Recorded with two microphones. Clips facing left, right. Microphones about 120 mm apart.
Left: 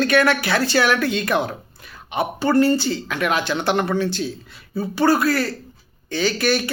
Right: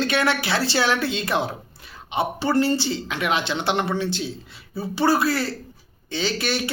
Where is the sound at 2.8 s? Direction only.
20° right (ahead or behind).